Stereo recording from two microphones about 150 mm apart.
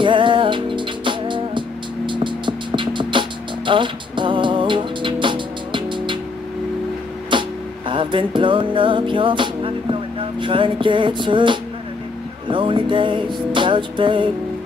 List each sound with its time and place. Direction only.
0.0 s music: 35° right (ahead or behind)
7.9 s music: 35° right (ahead or behind)